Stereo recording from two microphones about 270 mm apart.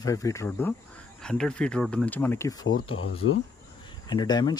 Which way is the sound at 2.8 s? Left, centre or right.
Left.